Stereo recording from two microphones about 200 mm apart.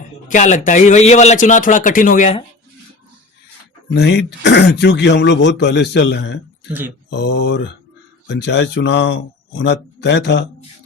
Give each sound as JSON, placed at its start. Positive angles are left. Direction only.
{"t": 0.3, "sound": "a man's voice", "side_deg": 40}
{"t": 3.9, "sound": "speech", "side_deg": 55}